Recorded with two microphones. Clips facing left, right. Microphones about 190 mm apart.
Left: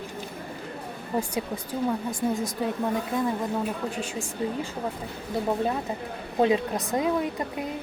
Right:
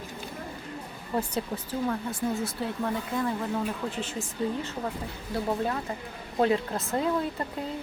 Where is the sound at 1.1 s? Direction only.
10° left (ahead or behind).